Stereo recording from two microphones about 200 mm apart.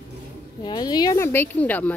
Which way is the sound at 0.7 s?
20° left (ahead or behind).